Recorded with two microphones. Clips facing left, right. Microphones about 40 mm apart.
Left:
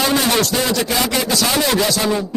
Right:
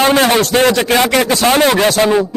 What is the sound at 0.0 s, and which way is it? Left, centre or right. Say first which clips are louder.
A man's voice: right 6 dB; right.